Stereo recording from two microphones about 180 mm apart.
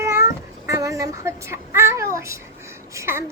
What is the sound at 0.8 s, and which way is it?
Child singing, 20° right (ahead or behind).